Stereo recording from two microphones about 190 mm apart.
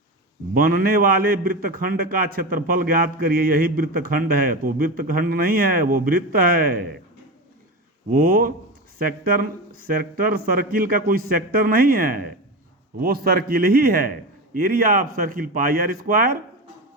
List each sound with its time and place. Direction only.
0.5 s a man's voice: 50° right (ahead or behind)
8.1 s a man's voice: 50° right (ahead or behind)